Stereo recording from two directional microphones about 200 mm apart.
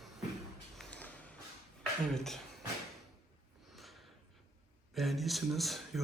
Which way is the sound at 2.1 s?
Centre (ahead or behind).